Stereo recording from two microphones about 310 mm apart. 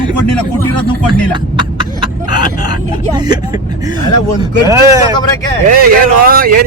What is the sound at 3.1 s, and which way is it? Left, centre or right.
Speech, centre.